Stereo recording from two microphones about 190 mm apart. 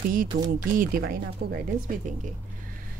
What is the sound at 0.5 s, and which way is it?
Speech, 50° right (ahead or behind).